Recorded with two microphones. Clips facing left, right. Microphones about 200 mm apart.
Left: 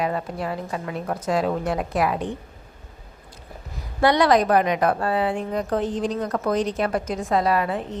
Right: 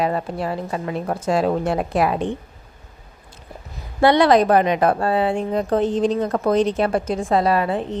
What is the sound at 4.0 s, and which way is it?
A woman's voice, 25° right (ahead or behind).